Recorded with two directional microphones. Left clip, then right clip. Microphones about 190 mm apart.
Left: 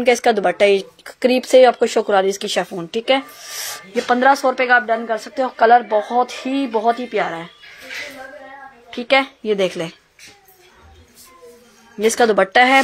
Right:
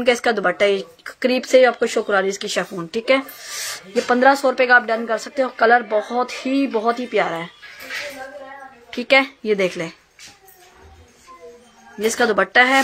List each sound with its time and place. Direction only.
0.0 s speech: 15° left (ahead or behind); by 7.4 s 5° right (ahead or behind)
8.9 s speech: centre (ahead or behind)
12.0 s speech: 20° left (ahead or behind)